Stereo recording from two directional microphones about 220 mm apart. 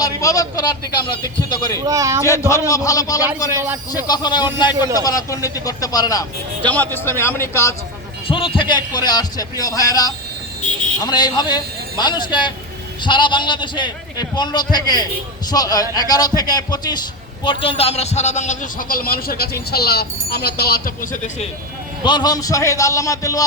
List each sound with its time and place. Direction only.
0.0 s a man's voice: 15° left (ahead or behind)
1.8 s a man's voice: 15° right (ahead or behind)
2.5 s a man's voice: 15° left (ahead or behind)
3.6 s a man's voice: 10° right (ahead or behind)
4.0 s a man's voice: 20° left (ahead or behind)
8.3 s a man's voice: 25° left (ahead or behind)
22.0 s a man's voice: 20° left (ahead or behind)